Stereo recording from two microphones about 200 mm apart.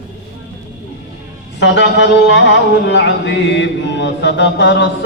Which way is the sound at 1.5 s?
65° left (ahead or behind).